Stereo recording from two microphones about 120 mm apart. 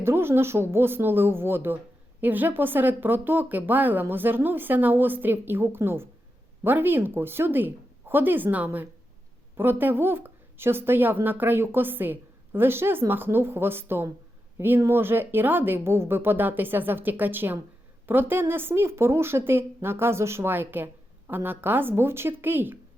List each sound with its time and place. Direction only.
0.0 s a woman's voice: 20° right (ahead or behind)